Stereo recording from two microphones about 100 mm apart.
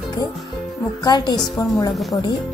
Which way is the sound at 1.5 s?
30° left (ahead or behind).